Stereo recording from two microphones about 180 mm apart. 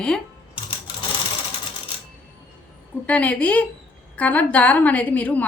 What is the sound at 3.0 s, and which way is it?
A woman's voice, 10° left (ahead or behind).